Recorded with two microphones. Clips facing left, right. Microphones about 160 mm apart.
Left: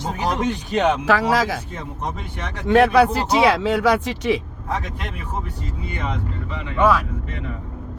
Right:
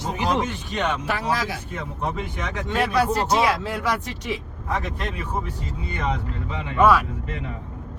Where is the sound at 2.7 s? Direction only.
60° left (ahead or behind); by 4.4 s 90° left.